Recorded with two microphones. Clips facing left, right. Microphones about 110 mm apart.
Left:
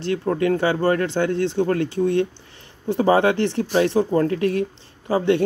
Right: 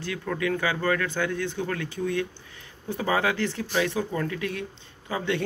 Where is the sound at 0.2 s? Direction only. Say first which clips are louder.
Left 6 dB; 40° left (ahead or behind).